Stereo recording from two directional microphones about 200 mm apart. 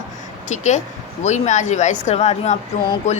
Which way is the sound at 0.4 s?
35° left (ahead or behind).